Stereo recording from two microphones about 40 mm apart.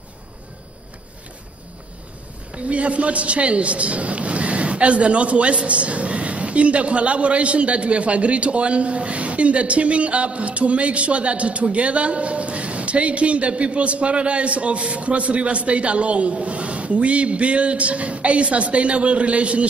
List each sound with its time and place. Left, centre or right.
2.5 s a man's voice: right